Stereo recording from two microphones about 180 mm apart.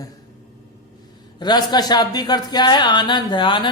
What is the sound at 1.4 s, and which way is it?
Speech, 25° left (ahead or behind).